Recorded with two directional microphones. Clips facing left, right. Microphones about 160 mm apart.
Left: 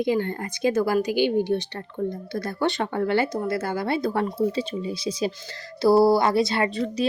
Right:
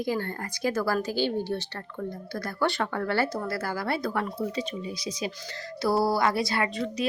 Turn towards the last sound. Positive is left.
turn(degrees=35)  # may be behind; listen again after turning